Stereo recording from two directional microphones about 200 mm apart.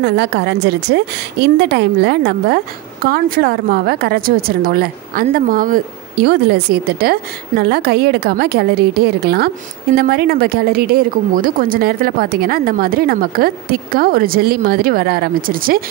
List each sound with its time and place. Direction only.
0.0 s a woman's voice: 55° right (ahead or behind)